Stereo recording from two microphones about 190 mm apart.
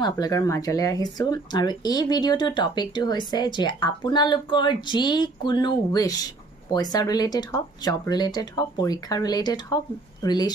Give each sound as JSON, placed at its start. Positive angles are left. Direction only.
{"t": 0.0, "sound": "speech", "side_deg": 20}